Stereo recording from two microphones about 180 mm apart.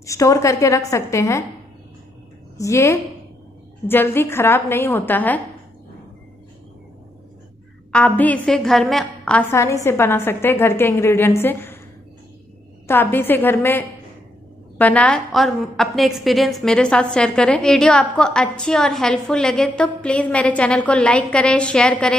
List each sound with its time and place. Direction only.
0.0 s a woman's voice: 15° left (ahead or behind)
2.5 s a woman's voice: 15° left (ahead or behind)
7.9 s a woman's voice: 10° left (ahead or behind)
12.8 s a woman's voice: 10° left (ahead or behind)